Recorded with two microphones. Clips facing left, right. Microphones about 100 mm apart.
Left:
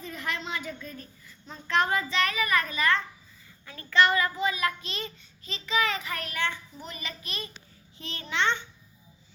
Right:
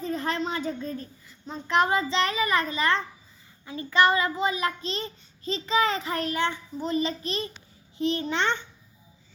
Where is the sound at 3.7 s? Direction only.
20° right (ahead or behind).